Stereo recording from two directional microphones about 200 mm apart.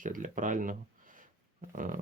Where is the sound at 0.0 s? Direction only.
40° right (ahead or behind).